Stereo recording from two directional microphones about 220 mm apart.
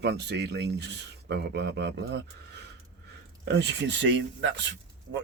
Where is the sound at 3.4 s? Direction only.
55° right (ahead or behind).